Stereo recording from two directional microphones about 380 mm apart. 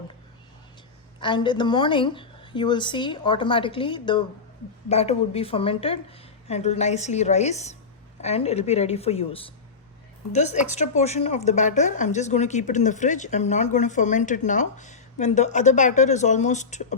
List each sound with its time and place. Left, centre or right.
1.2 s a woman's voice: centre